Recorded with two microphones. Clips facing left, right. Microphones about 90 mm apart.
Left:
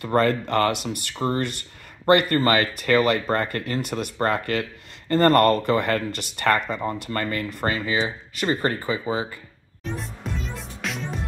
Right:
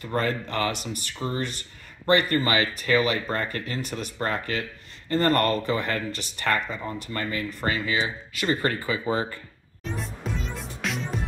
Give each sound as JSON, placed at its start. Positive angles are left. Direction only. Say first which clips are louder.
{"t": 0.1, "sound": "speech", "louder": "left 6 dB", "side_deg": 55}
{"t": 1.1, "sound": "speech", "louder": "left 5 dB", "side_deg": 45}
{"t": 7.0, "sound": "speech", "louder": "left 3 dB", "side_deg": 50}
{"t": 7.6, "sound": "speech", "louder": "left 2 dB", "side_deg": 35}
{"t": 9.0, "sound": "speech", "louder": "even", "side_deg": 10}
{"t": 9.9, "sound": "music", "louder": "right 2 dB", "side_deg": 0}